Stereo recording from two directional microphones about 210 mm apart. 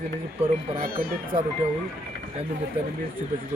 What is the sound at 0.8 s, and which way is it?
Speech, 45° right (ahead or behind).